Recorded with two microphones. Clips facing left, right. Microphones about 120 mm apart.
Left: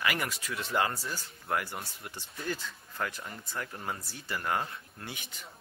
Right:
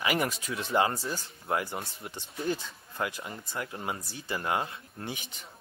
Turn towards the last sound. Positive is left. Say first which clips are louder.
# right 5 dB
turn(degrees=-20)  # may be behind; listen again after turning